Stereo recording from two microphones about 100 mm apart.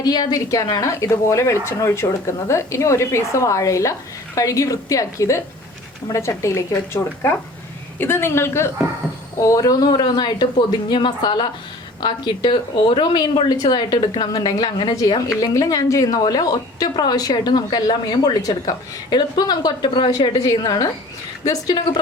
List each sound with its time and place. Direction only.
0.0 s a woman's voice: 40° left (ahead or behind)
15.3 s a woman's voice: 35° left (ahead or behind)